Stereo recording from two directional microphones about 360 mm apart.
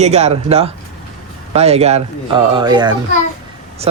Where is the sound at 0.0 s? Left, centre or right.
Centre.